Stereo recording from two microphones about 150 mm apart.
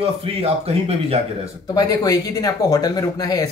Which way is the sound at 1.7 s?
25° left (ahead or behind).